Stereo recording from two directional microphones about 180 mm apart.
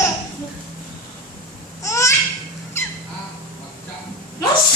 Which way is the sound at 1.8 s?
15° left (ahead or behind).